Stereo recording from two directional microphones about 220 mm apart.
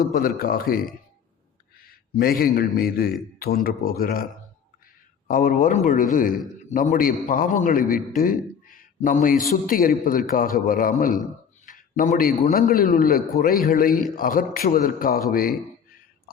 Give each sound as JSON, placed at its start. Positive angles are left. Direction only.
{"t": 0.1, "sound": "a man's voice", "side_deg": 45}
{"t": 5.3, "sound": "a man's voice", "side_deg": 40}